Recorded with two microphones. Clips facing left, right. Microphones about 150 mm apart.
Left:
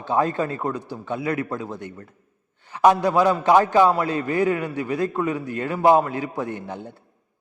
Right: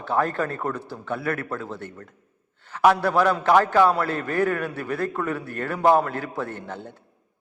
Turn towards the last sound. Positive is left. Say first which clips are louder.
# left 2 dB
turn(degrees=15)  # may be behind; listen again after turning